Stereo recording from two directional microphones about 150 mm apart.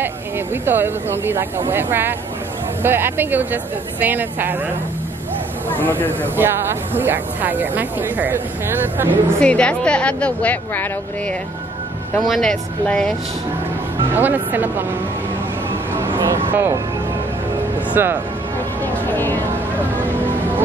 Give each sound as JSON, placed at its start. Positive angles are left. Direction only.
{"t": 0.7, "sound": "speech", "side_deg": -15}
{"t": 5.9, "sound": "a woman's voice", "side_deg": 10}
{"t": 6.3, "sound": "speech", "side_deg": -15}
{"t": 9.4, "sound": "a woman's voice", "side_deg": 5}
{"t": 12.2, "sound": "speech", "side_deg": 0}
{"t": 14.1, "sound": "speech", "side_deg": -10}
{"t": 16.4, "sound": "speech", "side_deg": -15}
{"t": 18.0, "sound": "speech", "side_deg": -15}
{"t": 19.0, "sound": "a woman's voice", "side_deg": 15}